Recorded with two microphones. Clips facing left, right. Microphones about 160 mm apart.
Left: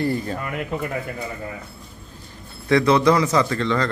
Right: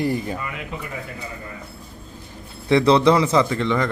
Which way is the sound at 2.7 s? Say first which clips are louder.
Right 1 dB; 25° right (ahead or behind).